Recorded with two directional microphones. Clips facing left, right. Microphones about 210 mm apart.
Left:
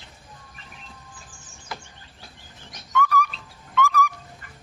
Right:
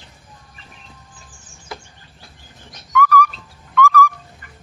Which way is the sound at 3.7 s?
20° left (ahead or behind).